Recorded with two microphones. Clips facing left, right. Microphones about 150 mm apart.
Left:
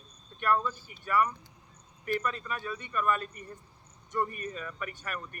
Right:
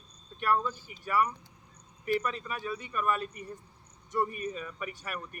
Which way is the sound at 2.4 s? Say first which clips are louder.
Right 1 dB; 10° right (ahead or behind).